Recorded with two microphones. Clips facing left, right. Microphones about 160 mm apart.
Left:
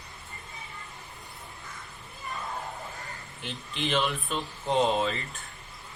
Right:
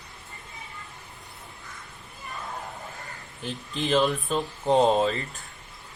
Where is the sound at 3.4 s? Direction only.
40° right (ahead or behind).